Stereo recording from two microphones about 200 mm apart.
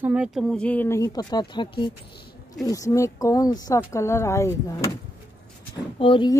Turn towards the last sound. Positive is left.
turn(degrees=25)  # may be behind; listen again after turning